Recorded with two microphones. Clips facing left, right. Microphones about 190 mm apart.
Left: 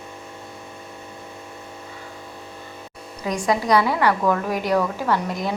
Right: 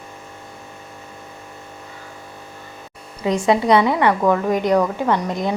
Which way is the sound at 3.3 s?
25° right (ahead or behind).